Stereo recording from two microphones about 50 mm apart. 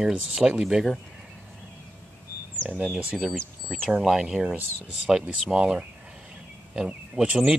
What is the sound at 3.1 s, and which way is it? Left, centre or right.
Speech, centre.